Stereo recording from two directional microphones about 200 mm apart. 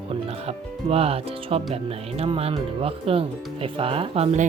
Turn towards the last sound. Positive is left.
turn(degrees=-35)  # may be behind; listen again after turning